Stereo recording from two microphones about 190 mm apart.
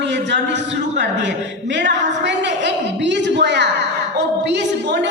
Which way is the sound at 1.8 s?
70° right (ahead or behind).